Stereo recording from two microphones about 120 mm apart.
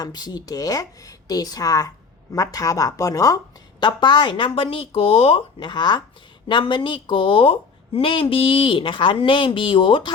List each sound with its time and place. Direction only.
0.0 s a woman's voice: 35° left (ahead or behind); by 5.6 s 55° left (ahead or behind)
5.6 s a woman's voice: 35° left (ahead or behind)